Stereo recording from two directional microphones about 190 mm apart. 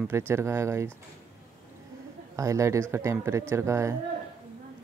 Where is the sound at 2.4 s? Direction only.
15° right (ahead or behind).